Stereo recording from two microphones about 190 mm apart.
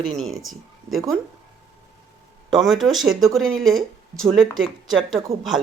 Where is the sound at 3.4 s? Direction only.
90° right.